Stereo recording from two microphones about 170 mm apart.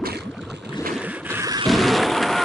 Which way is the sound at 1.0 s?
10° right (ahead or behind).